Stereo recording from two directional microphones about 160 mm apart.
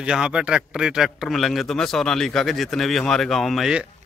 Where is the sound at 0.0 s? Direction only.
5° right (ahead or behind).